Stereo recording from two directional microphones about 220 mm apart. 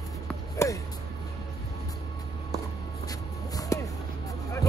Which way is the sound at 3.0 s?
15° left (ahead or behind).